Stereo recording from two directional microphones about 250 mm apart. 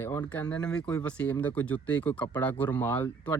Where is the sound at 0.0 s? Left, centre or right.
Centre.